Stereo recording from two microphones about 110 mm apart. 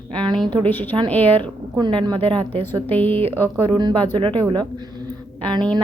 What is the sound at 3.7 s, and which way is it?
Speech, 45° right (ahead or behind).